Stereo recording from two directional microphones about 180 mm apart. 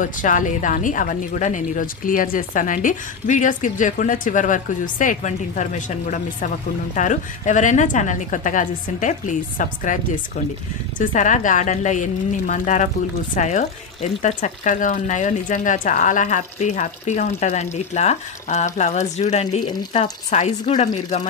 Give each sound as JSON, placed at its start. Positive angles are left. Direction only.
{"t": 0.0, "sound": "a woman's voice", "side_deg": 45}
{"t": 11.0, "sound": "a woman's voice", "side_deg": 45}